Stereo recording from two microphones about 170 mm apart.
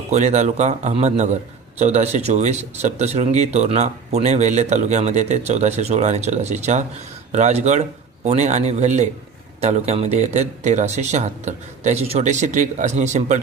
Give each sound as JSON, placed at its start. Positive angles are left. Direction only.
{"t": 0.1, "sound": "speech", "side_deg": -40}